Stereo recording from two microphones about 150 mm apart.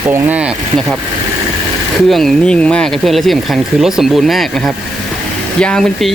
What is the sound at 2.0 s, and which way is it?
Speech, centre (ahead or behind).